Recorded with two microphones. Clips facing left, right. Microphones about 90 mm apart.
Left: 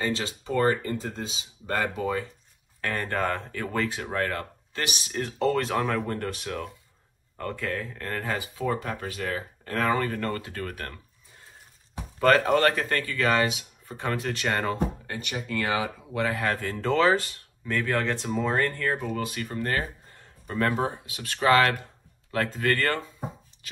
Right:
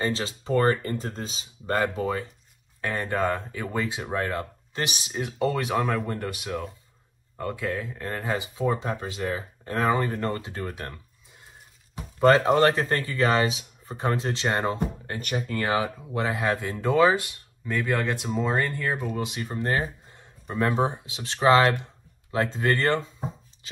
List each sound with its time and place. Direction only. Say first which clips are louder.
0.0 s speech: right 1 dB; 35° right (ahead or behind)
1.8 s speech: right 1 dB; 30° right (ahead or behind)
2.8 s speech: right 2 dB; 15° right (ahead or behind)
5.1 s speech: left 2 dB; 10° right (ahead or behind)
12.2 s speech: right 2 dB; 20° right (ahead or behind)
15.0 s speech: right 3 dB; 40° right (ahead or behind)
16.1 s speech: even; 25° right (ahead or behind)